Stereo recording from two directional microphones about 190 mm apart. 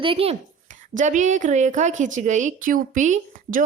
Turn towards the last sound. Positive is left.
turn(degrees=-45)  # may be behind; listen again after turning